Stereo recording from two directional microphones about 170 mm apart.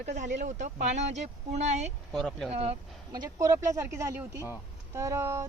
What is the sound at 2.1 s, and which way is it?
Speech, centre (ahead or behind).